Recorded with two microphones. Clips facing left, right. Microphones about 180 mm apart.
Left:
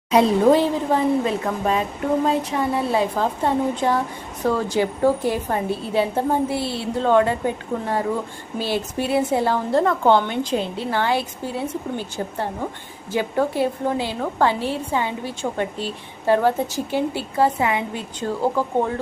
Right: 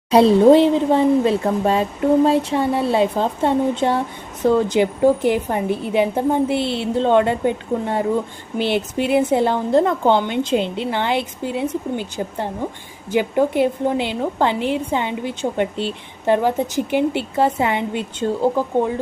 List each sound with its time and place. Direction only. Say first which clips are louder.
0.1 s a woman's voice: right 4 dB; 30° right (ahead or behind)